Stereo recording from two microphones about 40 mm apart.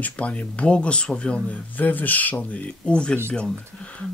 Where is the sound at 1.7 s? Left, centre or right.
Left.